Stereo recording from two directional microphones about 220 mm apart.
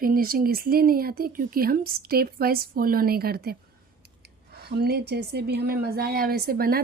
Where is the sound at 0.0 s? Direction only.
40° right (ahead or behind).